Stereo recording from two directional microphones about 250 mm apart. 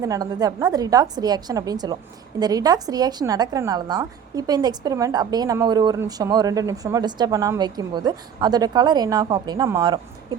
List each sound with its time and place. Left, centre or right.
0.0 s a woman's voice: centre